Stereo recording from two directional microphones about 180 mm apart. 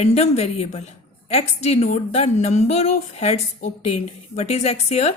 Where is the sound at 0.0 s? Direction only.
35° left (ahead or behind).